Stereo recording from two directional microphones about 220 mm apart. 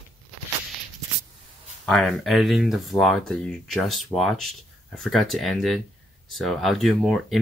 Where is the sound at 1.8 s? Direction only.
5° left (ahead or behind).